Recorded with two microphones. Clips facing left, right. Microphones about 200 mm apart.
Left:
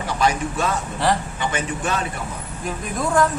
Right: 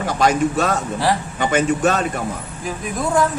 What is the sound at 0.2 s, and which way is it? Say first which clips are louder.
Speech: right 5 dB; 40° right (ahead or behind).